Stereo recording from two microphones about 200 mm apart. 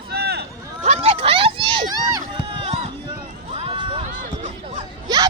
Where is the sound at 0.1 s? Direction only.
55° right (ahead or behind).